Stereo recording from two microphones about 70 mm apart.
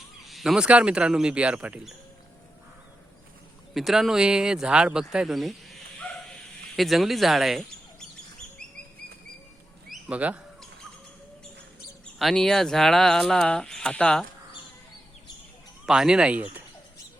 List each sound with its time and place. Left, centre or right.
0.3 s a sound: centre
0.6 s speech: centre
3.8 s speech: centre
6.1 s dog: centre
10.1 s speech: centre
12.2 s speech: centre
15.9 s speech: centre